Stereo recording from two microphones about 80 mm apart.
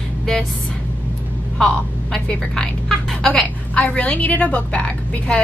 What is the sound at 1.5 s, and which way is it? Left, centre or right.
A woman's voice, centre.